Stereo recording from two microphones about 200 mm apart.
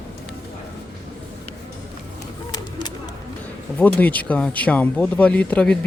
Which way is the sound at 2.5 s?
20° left (ahead or behind).